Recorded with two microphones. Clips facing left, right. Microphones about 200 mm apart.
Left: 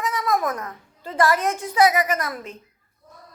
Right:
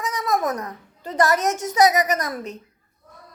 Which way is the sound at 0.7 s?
20° right (ahead or behind).